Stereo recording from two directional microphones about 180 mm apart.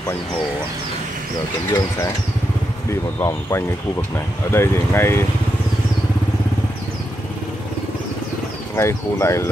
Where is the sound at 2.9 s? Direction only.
15° left (ahead or behind).